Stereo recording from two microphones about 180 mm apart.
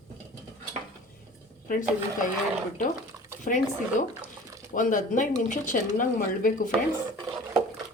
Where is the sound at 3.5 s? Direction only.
45° left (ahead or behind).